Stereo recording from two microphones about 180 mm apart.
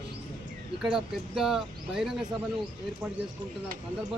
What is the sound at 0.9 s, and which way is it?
Speech, centre (ahead or behind).